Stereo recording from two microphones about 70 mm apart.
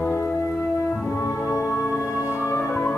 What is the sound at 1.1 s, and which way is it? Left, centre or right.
Music, left.